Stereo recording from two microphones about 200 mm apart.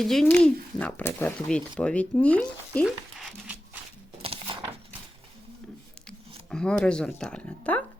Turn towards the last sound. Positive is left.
turn(degrees=5)  # may be behind; listen again after turning